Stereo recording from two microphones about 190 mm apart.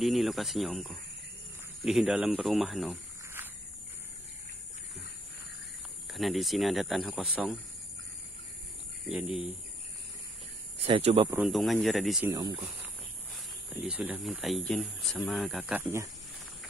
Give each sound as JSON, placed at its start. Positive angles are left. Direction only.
{"t": 0.0, "sound": "speech", "side_deg": 0}
{"t": 3.4, "sound": "a sound", "side_deg": -10}
{"t": 6.0, "sound": "speech", "side_deg": 0}
{"t": 10.8, "sound": "speech", "side_deg": -35}
{"t": 11.2, "sound": "speech", "side_deg": -5}
{"t": 12.3, "sound": "speech", "side_deg": -20}
{"t": 13.8, "sound": "speech", "side_deg": -5}